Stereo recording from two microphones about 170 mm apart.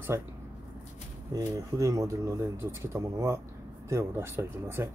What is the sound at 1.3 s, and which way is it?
Speech, 20° right (ahead or behind).